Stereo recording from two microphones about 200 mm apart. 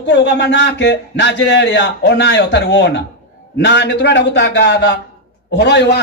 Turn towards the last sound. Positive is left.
turn(degrees=60)  # may be behind; listen again after turning